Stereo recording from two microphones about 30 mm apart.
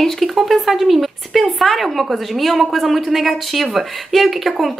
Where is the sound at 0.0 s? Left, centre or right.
Centre.